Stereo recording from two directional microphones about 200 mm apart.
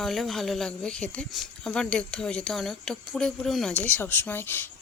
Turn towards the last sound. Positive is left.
turn(degrees=10)  # may be behind; listen again after turning